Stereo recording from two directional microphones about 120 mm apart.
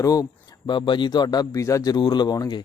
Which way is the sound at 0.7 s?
40° left (ahead or behind).